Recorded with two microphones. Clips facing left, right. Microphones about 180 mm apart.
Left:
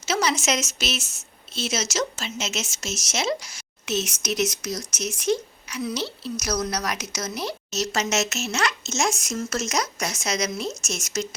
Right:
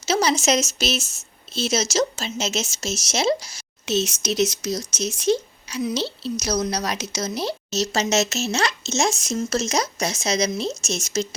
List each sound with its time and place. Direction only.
0.0 s a woman's voice: 35° right (ahead or behind)